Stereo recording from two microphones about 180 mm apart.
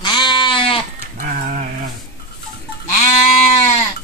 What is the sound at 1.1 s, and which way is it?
Sheep, 45° right (ahead or behind).